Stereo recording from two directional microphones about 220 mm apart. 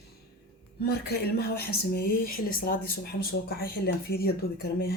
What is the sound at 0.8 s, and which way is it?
Speech, 45° left (ahead or behind).